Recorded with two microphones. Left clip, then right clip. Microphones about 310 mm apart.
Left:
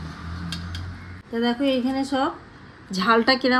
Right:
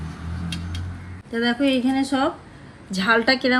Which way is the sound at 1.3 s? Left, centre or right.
Centre.